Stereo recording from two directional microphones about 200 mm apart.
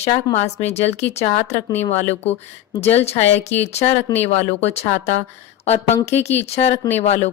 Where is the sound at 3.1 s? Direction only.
30° left (ahead or behind).